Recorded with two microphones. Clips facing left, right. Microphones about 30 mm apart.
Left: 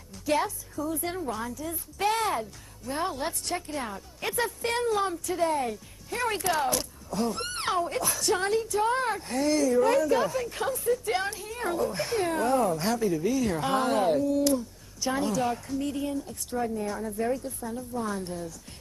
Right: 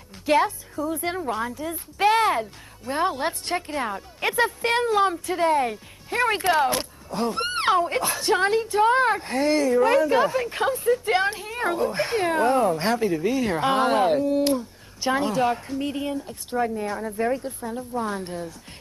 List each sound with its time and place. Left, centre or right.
0.2 s a woman's voice: right